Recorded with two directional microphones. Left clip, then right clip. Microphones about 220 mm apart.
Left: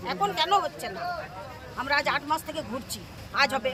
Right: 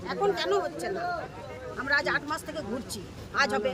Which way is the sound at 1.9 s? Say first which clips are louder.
Left 2 dB; centre (ahead or behind).